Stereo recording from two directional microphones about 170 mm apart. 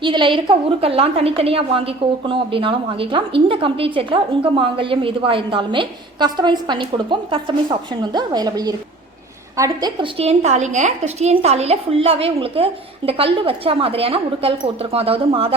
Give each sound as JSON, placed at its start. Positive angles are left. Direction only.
{"t": 0.0, "sound": "a woman's voice", "side_deg": -30}